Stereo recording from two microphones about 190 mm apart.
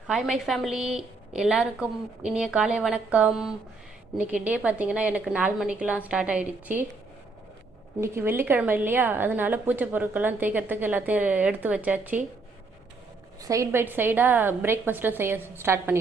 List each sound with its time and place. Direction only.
0.1 s a woman's voice: centre (ahead or behind)
8.0 s a woman's voice: 10° right (ahead or behind)
13.4 s a woman's voice: 15° right (ahead or behind)